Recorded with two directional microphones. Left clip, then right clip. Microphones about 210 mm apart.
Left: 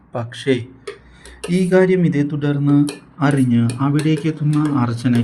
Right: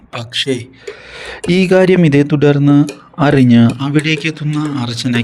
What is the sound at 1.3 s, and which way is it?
Speech, 40° right (ahead or behind).